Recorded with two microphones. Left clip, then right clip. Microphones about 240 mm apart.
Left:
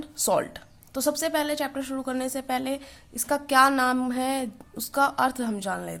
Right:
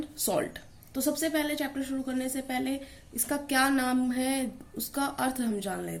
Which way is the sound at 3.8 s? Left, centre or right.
Left.